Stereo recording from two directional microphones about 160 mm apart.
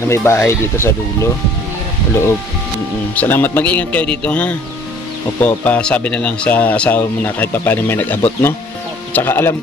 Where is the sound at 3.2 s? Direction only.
10° left (ahead or behind).